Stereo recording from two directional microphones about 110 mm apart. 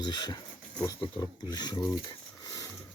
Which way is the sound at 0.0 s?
40° left (ahead or behind).